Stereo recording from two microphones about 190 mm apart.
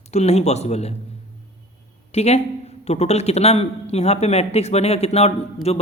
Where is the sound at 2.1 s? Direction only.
35° left (ahead or behind).